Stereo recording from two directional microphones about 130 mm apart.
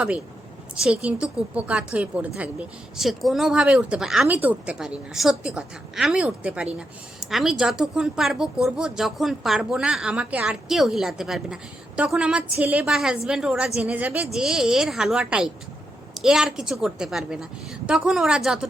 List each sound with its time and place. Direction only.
0.8 s a woman's voice: 10° right (ahead or behind)